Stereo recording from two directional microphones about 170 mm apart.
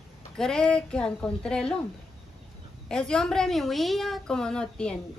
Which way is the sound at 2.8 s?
5° left (ahead or behind).